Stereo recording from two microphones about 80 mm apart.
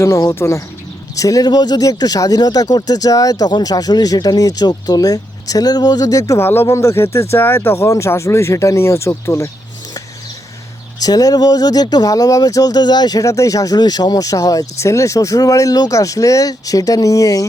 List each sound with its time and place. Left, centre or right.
0.0 s speech: left
1.5 s speech: left
6.4 s speech: left
11.0 s speech: left